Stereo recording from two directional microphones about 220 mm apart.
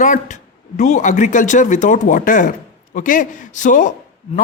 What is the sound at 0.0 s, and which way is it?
A man's voice, 35° left (ahead or behind).